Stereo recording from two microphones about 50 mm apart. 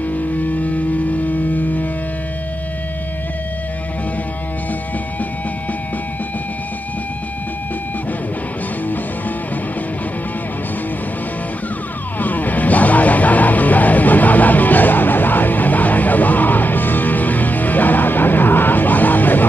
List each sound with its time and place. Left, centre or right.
0.1 s music: left
12.2 s music: left